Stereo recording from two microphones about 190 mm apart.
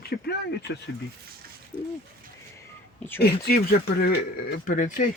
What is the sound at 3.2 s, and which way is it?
Speech, 55° left (ahead or behind).